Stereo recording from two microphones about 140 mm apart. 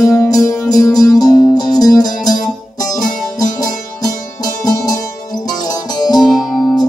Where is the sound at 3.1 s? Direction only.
65° left (ahead or behind).